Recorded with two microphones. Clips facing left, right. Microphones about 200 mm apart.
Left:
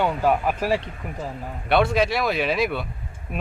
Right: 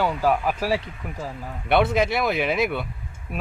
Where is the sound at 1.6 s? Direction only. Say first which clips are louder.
Even; 20° right (ahead or behind).